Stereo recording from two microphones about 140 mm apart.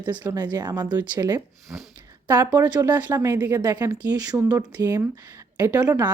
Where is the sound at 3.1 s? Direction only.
25° right (ahead or behind).